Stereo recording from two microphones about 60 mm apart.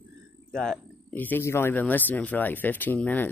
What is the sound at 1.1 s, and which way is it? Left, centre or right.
Speech, left.